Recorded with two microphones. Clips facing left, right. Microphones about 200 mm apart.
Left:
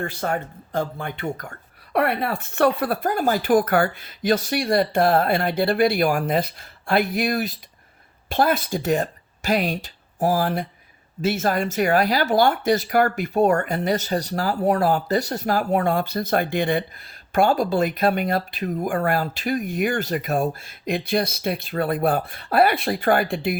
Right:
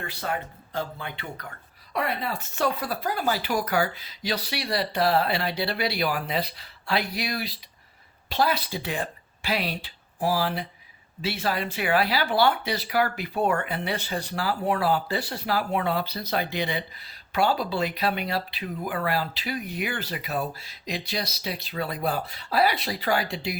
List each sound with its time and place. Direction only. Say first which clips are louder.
0.0 s speech: left 6 dB; 50° left (ahead or behind)